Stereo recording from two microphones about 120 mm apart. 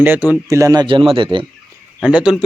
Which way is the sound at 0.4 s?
25° right (ahead or behind).